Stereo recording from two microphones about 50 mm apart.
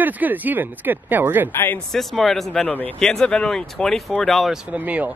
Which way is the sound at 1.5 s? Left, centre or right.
Left.